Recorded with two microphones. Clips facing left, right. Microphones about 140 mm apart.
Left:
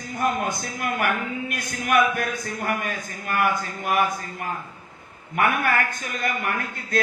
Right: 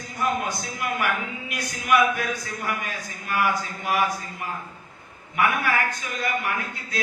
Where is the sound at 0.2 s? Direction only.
50° left (ahead or behind).